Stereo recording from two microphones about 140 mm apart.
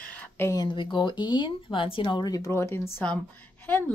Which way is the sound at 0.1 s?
10° left (ahead or behind).